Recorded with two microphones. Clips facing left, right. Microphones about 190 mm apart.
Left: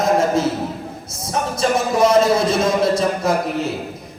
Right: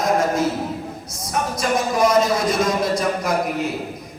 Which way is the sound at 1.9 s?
25° left (ahead or behind).